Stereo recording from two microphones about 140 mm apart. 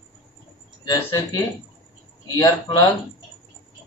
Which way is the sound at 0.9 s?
25° left (ahead or behind).